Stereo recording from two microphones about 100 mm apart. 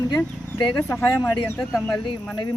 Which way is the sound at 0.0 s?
30° left (ahead or behind).